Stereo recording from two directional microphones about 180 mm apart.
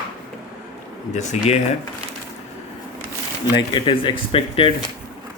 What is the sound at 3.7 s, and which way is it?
Speech, 30° left (ahead or behind).